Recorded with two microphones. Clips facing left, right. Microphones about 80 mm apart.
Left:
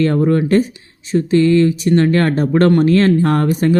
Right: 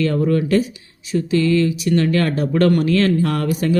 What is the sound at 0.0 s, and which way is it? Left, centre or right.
Speech, left.